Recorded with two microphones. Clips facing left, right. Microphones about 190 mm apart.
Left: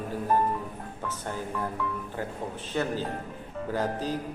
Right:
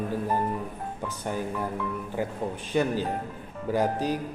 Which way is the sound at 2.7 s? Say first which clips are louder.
Right 4 dB; 15° right (ahead or behind).